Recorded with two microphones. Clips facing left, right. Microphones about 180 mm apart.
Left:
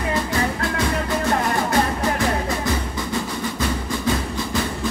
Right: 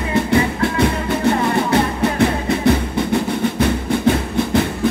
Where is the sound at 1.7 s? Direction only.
65° right (ahead or behind).